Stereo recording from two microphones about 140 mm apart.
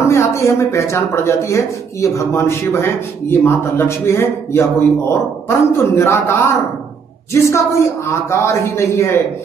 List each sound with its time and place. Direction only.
0.0 s speech: 20° left (ahead or behind)